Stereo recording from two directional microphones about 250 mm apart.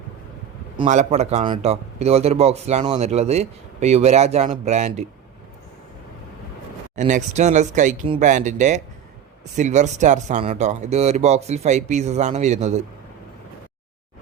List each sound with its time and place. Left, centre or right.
0.8 s a man's voice: right
6.9 s a man's voice: right